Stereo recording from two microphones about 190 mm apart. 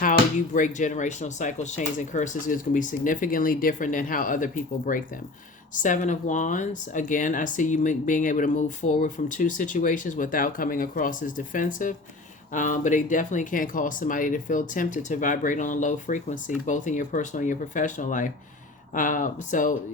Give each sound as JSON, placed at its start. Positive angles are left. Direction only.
{"t": 0.0, "sound": "speech", "side_deg": 45}